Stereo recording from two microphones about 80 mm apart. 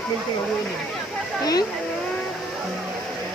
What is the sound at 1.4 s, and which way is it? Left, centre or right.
Speech, left.